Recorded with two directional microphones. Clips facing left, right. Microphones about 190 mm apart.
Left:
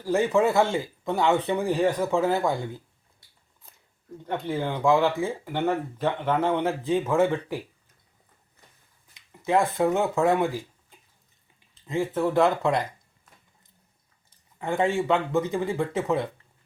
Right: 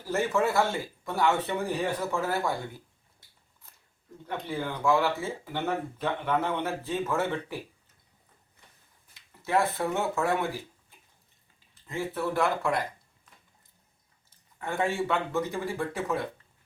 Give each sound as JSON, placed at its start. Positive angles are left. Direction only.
{"t": 0.0, "sound": "speech", "side_deg": 15}
{"t": 4.2, "sound": "speech", "side_deg": 20}
{"t": 9.1, "sound": "speech", "side_deg": 15}
{"t": 11.9, "sound": "speech", "side_deg": 15}
{"t": 14.3, "sound": "speech", "side_deg": 15}